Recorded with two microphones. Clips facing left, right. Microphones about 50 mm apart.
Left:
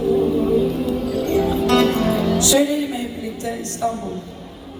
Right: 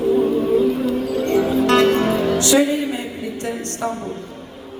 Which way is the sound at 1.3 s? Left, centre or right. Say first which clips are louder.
Right 1 dB; right.